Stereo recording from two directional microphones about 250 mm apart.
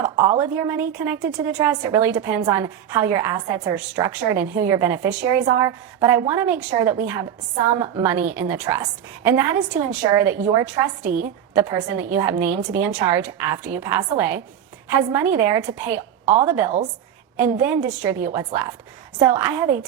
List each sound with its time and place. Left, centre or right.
0.3 s a woman's voice: centre
16.2 s a woman's voice: right
17.3 s a woman's voice: centre